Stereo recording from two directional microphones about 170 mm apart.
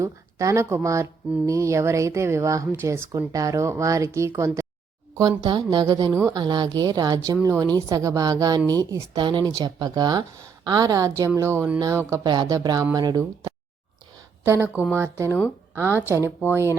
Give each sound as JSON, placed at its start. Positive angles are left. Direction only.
{"t": 0.0, "sound": "a woman's voice", "side_deg": -20}